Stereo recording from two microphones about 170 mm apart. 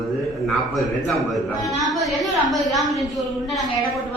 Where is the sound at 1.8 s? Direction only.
Centre (ahead or behind).